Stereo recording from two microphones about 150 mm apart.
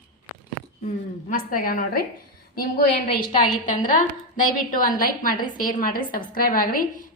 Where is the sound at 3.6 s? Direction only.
60° left (ahead or behind).